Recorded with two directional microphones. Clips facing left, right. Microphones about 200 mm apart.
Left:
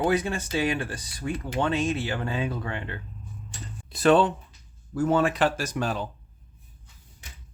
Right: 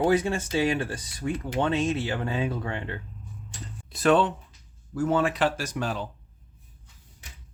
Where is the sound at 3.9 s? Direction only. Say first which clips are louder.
Left 2 dB; 30° left (ahead or behind).